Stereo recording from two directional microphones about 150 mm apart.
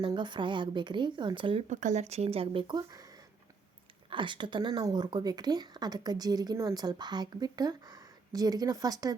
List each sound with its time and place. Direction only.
0.0 s speech: 30° right (ahead or behind)
1.7 s a woman's voice: 55° right (ahead or behind); by 9.1 s 25° right (ahead or behind)